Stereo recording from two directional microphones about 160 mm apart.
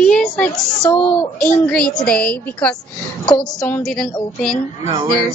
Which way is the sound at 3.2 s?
25° left (ahead or behind).